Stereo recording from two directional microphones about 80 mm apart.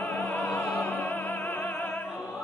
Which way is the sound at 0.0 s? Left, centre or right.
Left.